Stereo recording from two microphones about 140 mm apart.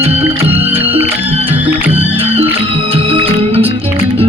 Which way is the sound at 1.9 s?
45° right (ahead or behind).